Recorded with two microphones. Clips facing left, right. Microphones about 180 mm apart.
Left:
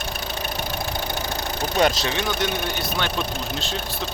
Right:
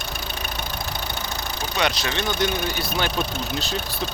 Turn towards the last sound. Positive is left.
turn(degrees=0)  # may be behind; listen again after turning